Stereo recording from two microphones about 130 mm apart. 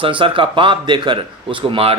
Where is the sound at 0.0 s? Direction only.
40° right (ahead or behind).